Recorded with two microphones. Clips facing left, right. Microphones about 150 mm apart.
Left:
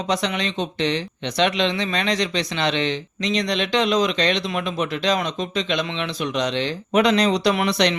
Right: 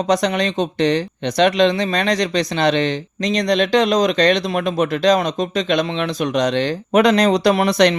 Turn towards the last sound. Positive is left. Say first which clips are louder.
# right 5 dB
turn(degrees=-45)  # may be behind; listen again after turning